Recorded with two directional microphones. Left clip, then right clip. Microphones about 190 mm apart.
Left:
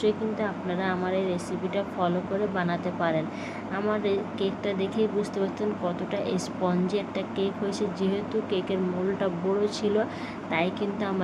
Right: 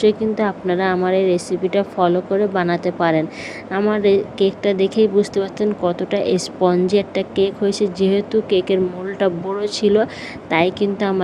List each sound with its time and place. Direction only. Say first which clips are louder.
0.0 s a woman's voice: right 10 dB; 55° right (ahead or behind)